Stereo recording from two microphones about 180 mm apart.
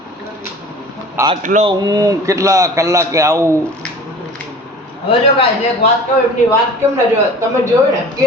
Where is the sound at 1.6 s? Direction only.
20° right (ahead or behind).